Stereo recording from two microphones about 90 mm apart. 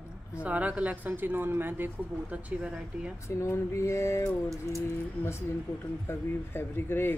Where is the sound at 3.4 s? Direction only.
30° left (ahead or behind).